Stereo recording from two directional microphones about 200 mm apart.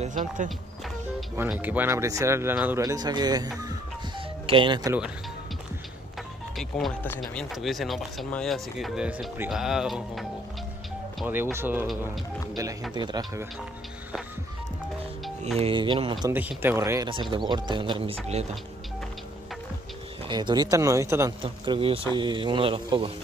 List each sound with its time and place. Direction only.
0.0 s speech: 40° right (ahead or behind)
1.3 s speech: 10° right (ahead or behind)
4.5 s speech: 25° right (ahead or behind)
6.5 s speech: centre (ahead or behind)
12.9 s speech: 20° right (ahead or behind)
15.2 s music: centre (ahead or behind)
15.6 s speech: 25° right (ahead or behind)
16.3 s speech: 10° right (ahead or behind); by 18.4 s 25° right (ahead or behind)
20.2 s speech: 20° right (ahead or behind)
21.4 s speech: 25° right (ahead or behind)